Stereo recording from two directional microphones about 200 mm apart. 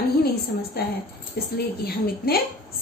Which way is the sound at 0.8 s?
50° left (ahead or behind).